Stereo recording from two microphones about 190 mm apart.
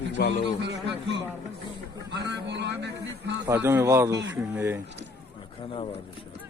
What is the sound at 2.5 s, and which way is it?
Music, 65° right (ahead or behind).